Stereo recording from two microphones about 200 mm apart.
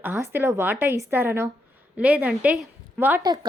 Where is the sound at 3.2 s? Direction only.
20° right (ahead or behind).